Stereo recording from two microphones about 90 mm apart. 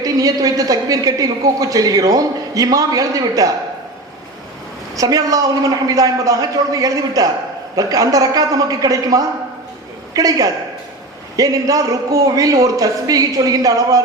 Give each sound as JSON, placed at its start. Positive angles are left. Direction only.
{"t": 0.0, "sound": "speech", "side_deg": -45}
{"t": 4.9, "sound": "a woman's voice", "side_deg": -40}